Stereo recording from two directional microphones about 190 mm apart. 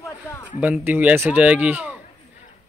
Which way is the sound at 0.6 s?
10° right (ahead or behind).